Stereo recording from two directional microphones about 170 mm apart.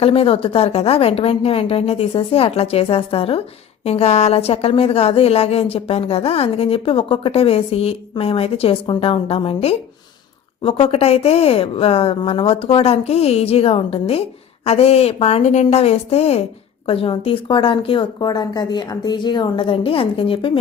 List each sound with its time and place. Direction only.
0.0 s a woman's voice: 35° left (ahead or behind)